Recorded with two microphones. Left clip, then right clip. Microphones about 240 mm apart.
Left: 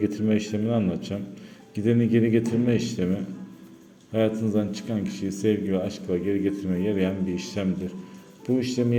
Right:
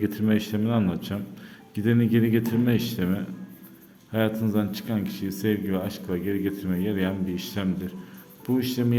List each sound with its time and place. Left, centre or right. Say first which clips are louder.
0.0 s speech: left 1 dB; centre